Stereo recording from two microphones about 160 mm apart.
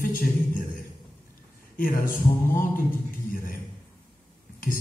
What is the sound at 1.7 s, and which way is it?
Speech, 60° left (ahead or behind).